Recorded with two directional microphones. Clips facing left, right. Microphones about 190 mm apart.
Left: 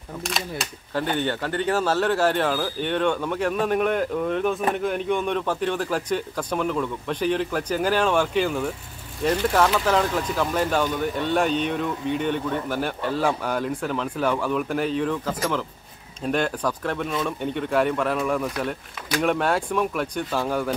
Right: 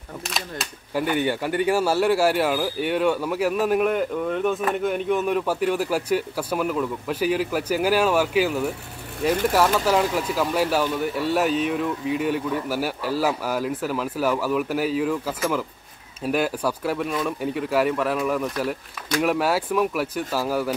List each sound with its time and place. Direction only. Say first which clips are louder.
0.9 s speech: right 2 dB; 10° right (ahead or behind)